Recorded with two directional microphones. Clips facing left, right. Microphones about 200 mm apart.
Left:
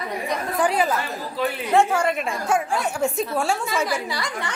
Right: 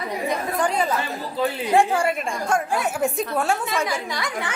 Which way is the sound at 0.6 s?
5° left (ahead or behind).